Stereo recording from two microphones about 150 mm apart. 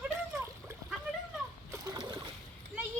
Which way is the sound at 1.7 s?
25° right (ahead or behind).